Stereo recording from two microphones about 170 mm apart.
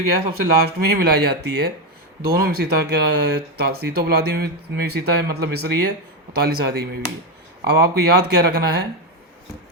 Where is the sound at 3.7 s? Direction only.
65° right (ahead or behind).